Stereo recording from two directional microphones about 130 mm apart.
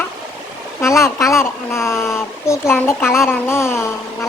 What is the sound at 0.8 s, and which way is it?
A child's voice, 20° left (ahead or behind).